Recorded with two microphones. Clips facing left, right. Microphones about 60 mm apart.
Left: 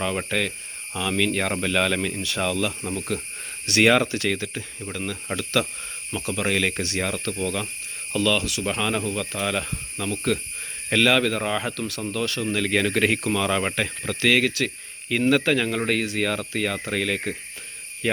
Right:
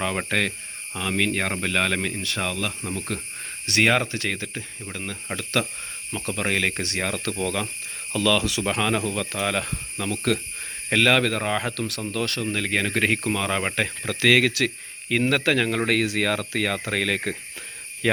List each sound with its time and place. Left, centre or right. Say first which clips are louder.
0.3 s speech: right 1 dB; right
0.9 s speech: left 1 dB; right
3.7 s speech: left 2 dB; right
7.2 s speech: right 1 dB; right
10.8 s speech: even; right
12.5 s speech: left 2 dB; right
14.2 s speech: right 2 dB; right
15.3 s speech: left 3 dB; right
15.9 s speech: right 1 dB; right
18.0 s speech: right 2 dB; right